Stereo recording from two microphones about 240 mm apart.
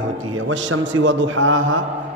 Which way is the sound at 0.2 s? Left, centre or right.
Right.